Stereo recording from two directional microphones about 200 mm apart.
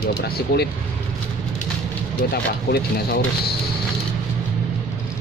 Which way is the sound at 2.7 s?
50° left (ahead or behind).